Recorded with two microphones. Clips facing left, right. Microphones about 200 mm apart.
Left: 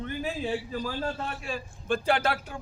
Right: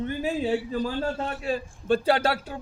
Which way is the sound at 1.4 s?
40° right (ahead or behind).